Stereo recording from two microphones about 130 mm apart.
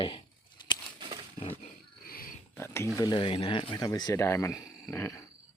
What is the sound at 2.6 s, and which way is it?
Speech, 20° left (ahead or behind).